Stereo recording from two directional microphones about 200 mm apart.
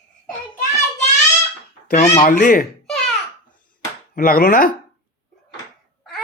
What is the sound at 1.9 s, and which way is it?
Speech, 35° left (ahead or behind).